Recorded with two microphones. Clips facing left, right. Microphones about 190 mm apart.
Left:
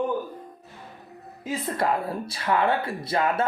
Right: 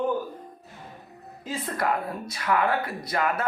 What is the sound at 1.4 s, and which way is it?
Speech, 25° left (ahead or behind).